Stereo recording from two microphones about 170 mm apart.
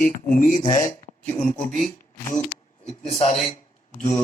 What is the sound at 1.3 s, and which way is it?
Speech, 5° left (ahead or behind).